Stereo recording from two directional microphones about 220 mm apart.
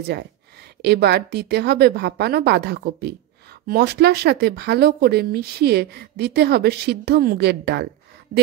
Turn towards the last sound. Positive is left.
turn(degrees=-50)  # may be behind; listen again after turning